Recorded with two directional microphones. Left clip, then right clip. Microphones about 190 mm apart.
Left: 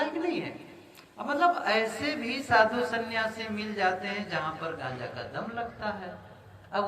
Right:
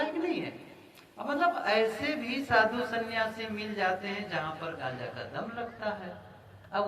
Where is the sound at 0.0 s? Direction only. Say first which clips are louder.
Left 1 dB; 30° left (ahead or behind).